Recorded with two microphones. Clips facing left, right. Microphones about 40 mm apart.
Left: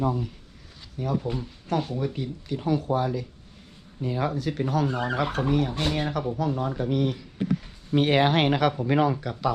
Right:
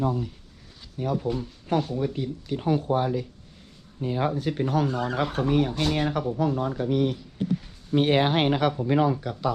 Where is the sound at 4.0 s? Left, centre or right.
Centre.